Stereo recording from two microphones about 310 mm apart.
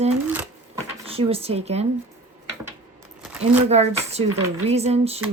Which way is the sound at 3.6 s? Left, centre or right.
Right.